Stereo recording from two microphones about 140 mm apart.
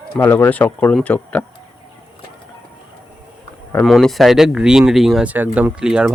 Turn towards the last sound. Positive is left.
turn(degrees=-5)  # may be behind; listen again after turning